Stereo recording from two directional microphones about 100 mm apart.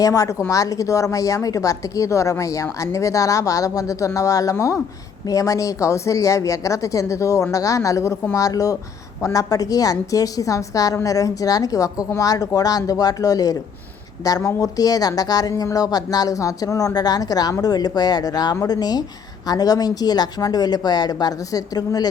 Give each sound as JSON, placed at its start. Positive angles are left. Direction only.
{"t": 0.0, "sound": "a woman's voice", "side_deg": 35}